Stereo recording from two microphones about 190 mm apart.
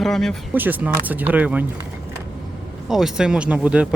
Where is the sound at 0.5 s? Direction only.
10° right (ahead or behind).